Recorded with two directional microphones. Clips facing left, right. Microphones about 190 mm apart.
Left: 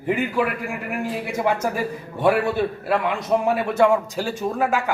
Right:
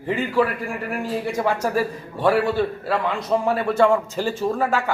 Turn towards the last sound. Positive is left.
turn(degrees=15)  # may be behind; listen again after turning